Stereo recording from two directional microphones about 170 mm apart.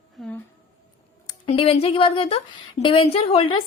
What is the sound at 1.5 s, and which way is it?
A woman's voice, 35° left (ahead or behind).